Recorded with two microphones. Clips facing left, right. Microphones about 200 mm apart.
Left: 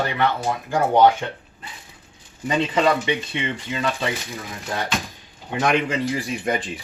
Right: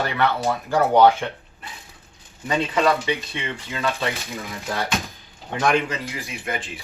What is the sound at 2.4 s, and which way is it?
Speech, 15° left (ahead or behind).